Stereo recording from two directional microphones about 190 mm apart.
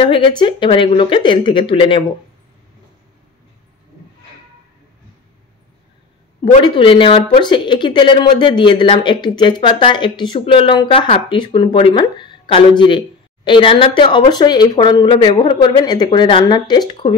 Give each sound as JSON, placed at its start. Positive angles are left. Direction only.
{"t": 0.0, "sound": "speech", "side_deg": 25}
{"t": 6.4, "sound": "speech", "side_deg": 25}